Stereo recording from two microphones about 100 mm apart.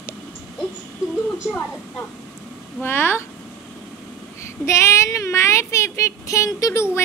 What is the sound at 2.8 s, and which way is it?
Speech, 20° left (ahead or behind).